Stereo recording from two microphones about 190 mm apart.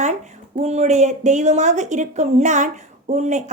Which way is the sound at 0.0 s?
40° right (ahead or behind).